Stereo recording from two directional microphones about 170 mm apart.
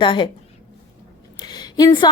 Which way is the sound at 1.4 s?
25° left (ahead or behind).